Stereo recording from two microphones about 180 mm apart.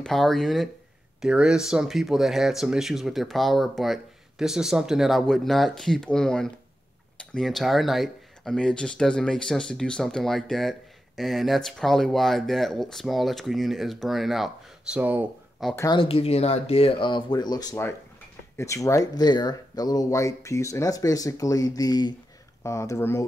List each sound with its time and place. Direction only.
0.0 s speech: centre (ahead or behind)
15.7 s speech: 15° left (ahead or behind)
16.0 s speech: 35° left (ahead or behind); by 23.2 s 15° left (ahead or behind)